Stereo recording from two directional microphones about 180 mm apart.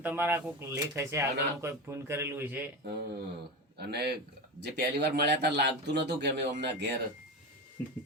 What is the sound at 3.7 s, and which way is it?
A man's voice, 65° right (ahead or behind).